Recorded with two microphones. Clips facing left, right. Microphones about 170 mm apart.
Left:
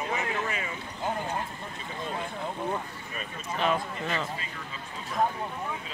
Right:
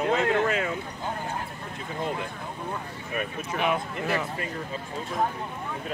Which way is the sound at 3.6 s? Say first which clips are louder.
Right 1 dB; 10° right (ahead or behind).